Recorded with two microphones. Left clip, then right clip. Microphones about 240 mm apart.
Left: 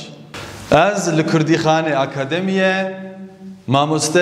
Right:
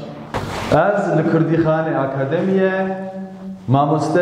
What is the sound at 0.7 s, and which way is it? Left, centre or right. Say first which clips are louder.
A man's voice: left 1 dB; left.